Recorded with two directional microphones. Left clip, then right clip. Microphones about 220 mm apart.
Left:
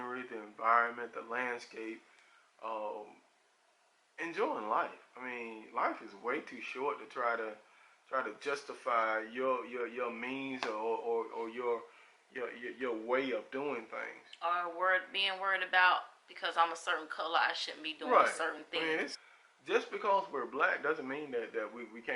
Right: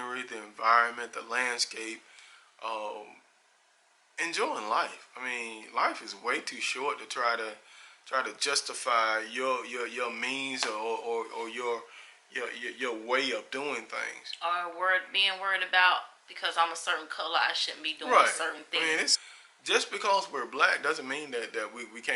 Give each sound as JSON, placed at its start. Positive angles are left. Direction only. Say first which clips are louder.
{"t": 0.0, "sound": "speech", "louder": "right 5 dB", "side_deg": 10}
{"t": 2.8, "sound": "speech", "louder": "right 3 dB", "side_deg": 40}
{"t": 4.2, "sound": "speech", "louder": "right 5 dB", "side_deg": 10}
{"t": 10.8, "sound": "speech", "louder": "right 2 dB", "side_deg": 40}
{"t": 11.1, "sound": "speech", "louder": "right 3 dB", "side_deg": 15}